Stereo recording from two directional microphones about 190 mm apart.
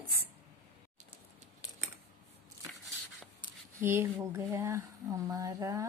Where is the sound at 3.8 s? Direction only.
15° right (ahead or behind).